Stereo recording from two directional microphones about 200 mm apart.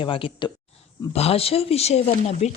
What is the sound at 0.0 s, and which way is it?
A woman's voice, 25° left (ahead or behind).